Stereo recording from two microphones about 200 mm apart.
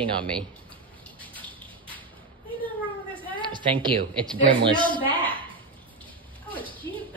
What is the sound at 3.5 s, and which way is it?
A woman's voice, 25° right (ahead or behind).